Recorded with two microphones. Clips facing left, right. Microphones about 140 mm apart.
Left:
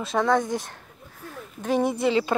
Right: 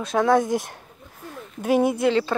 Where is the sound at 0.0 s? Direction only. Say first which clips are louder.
Right 3 dB; centre (ahead or behind).